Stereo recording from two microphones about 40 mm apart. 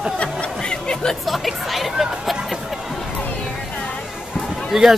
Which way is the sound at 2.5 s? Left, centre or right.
Centre.